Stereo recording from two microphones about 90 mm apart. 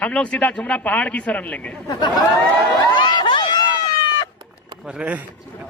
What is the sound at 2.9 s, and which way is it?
Run, 60° left (ahead or behind).